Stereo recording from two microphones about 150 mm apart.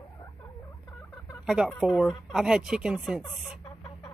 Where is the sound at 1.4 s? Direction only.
5° right (ahead or behind).